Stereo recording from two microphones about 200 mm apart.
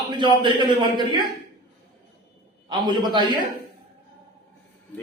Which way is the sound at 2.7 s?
20° right (ahead or behind).